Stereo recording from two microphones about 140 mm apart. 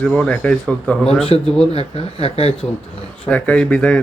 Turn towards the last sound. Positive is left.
turn(degrees=10)  # may be behind; listen again after turning